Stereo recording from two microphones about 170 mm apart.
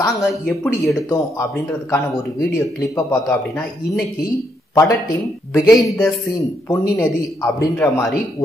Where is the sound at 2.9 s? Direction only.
20° left (ahead or behind).